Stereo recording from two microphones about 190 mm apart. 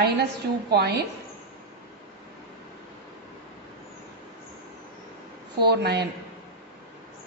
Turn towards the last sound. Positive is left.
turn(degrees=-60)  # may be behind; listen again after turning